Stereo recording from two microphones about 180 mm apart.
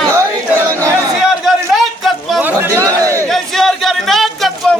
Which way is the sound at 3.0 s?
15° right (ahead or behind).